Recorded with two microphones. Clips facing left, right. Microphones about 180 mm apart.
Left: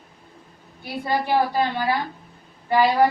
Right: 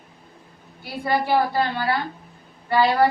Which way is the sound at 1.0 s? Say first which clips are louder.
Right 1 dB; 15° left (ahead or behind).